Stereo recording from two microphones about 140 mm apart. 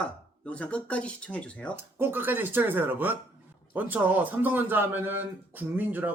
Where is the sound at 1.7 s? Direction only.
15° right (ahead or behind).